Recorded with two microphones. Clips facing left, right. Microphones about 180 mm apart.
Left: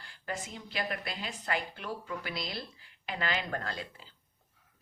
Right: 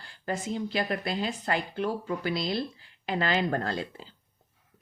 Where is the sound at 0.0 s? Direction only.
30° right (ahead or behind).